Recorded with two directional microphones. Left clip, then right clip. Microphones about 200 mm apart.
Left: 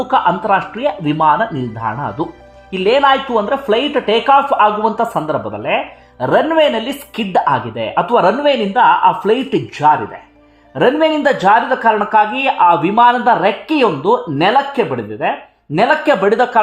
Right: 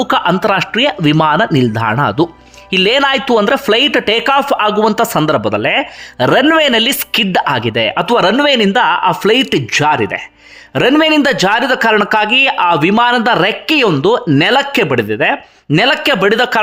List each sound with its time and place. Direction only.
0.0 s a man's voice: 25° right (ahead or behind)